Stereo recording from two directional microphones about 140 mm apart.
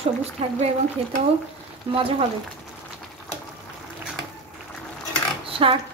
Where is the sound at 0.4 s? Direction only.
45° right (ahead or behind).